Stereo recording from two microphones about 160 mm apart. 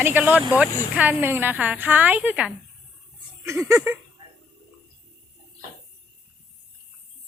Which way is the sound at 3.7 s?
15° right (ahead or behind).